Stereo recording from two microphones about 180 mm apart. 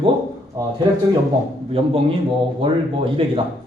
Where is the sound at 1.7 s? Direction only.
30° right (ahead or behind).